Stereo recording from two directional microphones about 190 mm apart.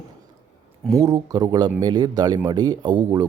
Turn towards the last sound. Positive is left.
turn(degrees=-20)  # may be behind; listen again after turning